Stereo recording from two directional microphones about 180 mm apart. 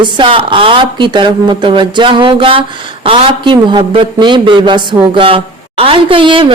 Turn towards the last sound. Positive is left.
turn(degrees=-30)  # may be behind; listen again after turning